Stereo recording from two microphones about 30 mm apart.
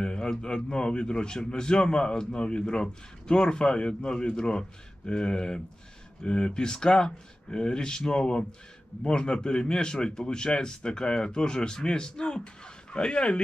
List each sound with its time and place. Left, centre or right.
0.0 s a man's voice: left